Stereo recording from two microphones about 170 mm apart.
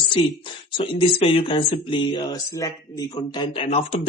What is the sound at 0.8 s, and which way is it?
Speech, 30° left (ahead or behind).